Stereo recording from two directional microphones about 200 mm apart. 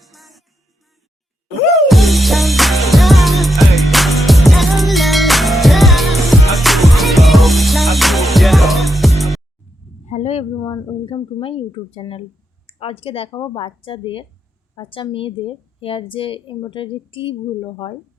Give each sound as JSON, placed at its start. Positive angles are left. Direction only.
{"t": 0.0, "sound": "music", "side_deg": 0}
{"t": 1.9, "sound": "music", "side_deg": 0}
{"t": 10.1, "sound": "a sound", "side_deg": 30}
{"t": 10.6, "sound": "a woman's voice", "side_deg": 20}